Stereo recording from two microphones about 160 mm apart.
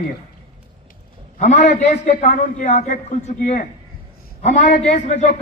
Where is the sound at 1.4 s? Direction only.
50° left (ahead or behind).